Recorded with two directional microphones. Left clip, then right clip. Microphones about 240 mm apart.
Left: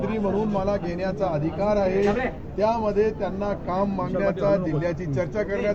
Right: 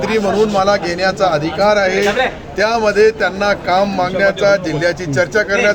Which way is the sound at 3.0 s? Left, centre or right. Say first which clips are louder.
Right 12 dB; centre.